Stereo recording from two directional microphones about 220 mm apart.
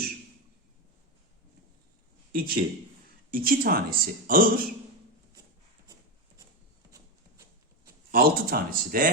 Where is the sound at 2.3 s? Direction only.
40° right (ahead or behind).